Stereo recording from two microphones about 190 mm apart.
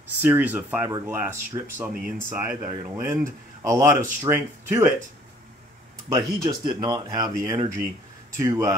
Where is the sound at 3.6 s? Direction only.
15° right (ahead or behind).